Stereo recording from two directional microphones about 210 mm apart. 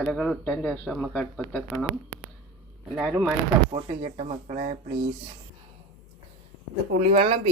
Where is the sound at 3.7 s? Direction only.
25° right (ahead or behind).